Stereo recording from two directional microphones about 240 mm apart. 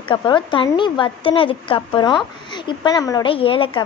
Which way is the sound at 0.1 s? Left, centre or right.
Centre.